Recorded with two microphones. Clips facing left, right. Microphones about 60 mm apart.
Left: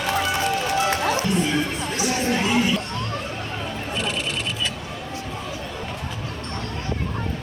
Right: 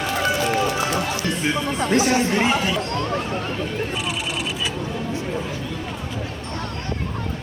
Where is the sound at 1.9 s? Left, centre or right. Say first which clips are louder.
Right 4 dB; right.